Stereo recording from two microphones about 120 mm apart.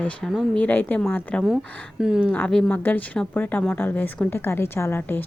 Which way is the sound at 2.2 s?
10° left (ahead or behind).